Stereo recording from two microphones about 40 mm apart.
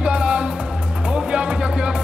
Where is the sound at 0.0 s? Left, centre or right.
Right.